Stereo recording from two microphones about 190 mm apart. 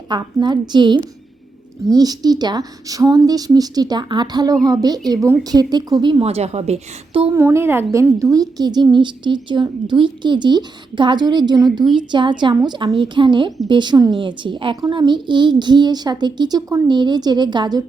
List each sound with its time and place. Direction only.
0.1 s a woman's voice: 25° right (ahead or behind)
7.3 s a woman's voice: 10° right (ahead or behind)